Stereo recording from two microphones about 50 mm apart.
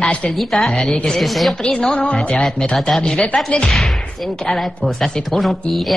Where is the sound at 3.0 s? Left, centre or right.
Left.